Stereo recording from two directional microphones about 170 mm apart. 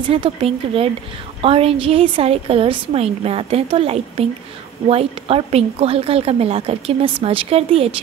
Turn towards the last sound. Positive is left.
turn(degrees=-35)  # may be behind; listen again after turning